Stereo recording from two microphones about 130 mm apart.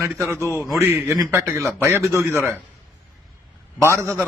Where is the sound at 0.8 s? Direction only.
20° right (ahead or behind).